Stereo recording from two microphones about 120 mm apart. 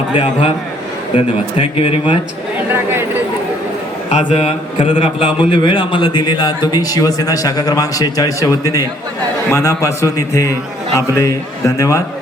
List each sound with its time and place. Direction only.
1.1 s a man's voice: 45° left (ahead or behind)
2.6 s speech: 20° right (ahead or behind)
4.2 s a man's voice: 55° left (ahead or behind); by 12.0 s 25° left (ahead or behind)